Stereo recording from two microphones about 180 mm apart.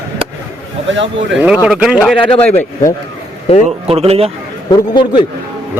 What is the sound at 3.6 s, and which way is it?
Speech, 35° right (ahead or behind).